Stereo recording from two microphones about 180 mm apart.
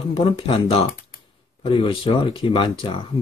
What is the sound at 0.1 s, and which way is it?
Speech, 30° left (ahead or behind).